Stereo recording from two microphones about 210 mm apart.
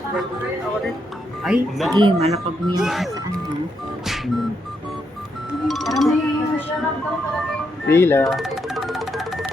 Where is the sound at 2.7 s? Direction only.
Centre (ahead or behind).